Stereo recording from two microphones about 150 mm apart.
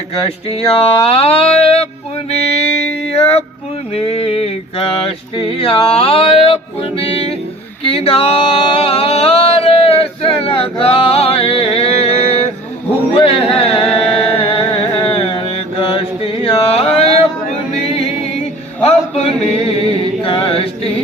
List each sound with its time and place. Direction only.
0.2 s male singing: 40° left (ahead or behind)
3.2 s male singing: 45° left (ahead or behind)
7.9 s a sound: 40° left (ahead or behind)
13.2 s music: 40° left (ahead or behind)
15.8 s chant: 35° left (ahead or behind)
17.7 s a capella: 45° left (ahead or behind)
18.8 s chant: 45° left (ahead or behind)